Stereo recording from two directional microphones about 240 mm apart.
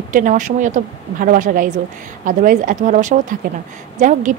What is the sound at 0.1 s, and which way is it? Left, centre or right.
A woman's voice, right.